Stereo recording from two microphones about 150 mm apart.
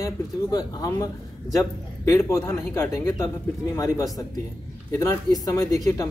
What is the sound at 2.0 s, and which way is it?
A man's voice, 20° left (ahead or behind).